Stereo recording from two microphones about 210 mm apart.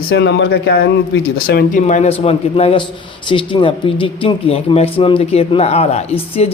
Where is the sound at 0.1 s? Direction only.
55° left (ahead or behind).